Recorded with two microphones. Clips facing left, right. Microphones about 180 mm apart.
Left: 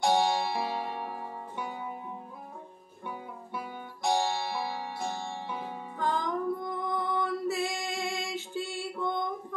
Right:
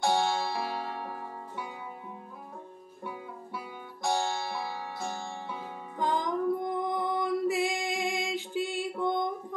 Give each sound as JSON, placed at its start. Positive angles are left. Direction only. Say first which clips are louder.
{"t": 0.0, "sound": "music", "louder": "left 1 dB", "side_deg": 15}
{"t": 3.5, "sound": "music", "louder": "left 4 dB", "side_deg": 20}
{"t": 5.9, "sound": "music", "louder": "right 1 dB", "side_deg": -15}